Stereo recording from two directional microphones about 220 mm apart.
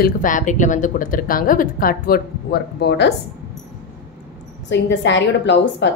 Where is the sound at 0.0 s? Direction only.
35° left (ahead or behind).